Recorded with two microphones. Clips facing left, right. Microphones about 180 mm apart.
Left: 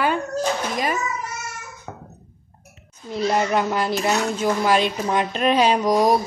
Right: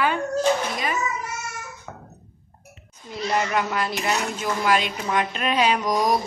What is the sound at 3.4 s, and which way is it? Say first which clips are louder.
A woman's voice: left 1 dB; 30° left (ahead or behind).